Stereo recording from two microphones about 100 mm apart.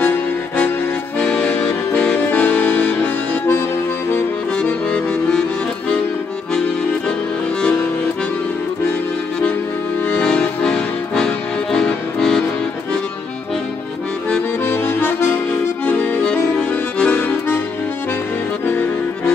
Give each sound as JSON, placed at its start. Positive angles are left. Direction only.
{"t": 1.2, "sound": "music", "side_deg": 15}
{"t": 4.6, "sound": "accordion", "side_deg": 15}
{"t": 10.0, "sound": "music", "side_deg": 10}
{"t": 14.6, "sound": "accordion", "side_deg": 20}
{"t": 17.0, "sound": "accordion", "side_deg": 20}
{"t": 18.7, "sound": "accordion", "side_deg": 15}